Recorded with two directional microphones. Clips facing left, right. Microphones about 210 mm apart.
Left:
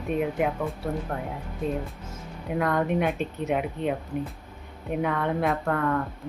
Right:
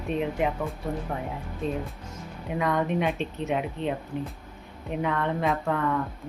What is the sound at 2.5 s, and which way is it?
Speech, centre (ahead or behind).